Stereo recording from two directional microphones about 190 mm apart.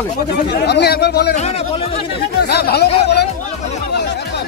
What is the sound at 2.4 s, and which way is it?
Speech, 60° left (ahead or behind).